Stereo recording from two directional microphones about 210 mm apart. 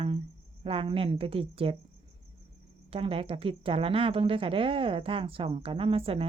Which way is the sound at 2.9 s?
25° right (ahead or behind).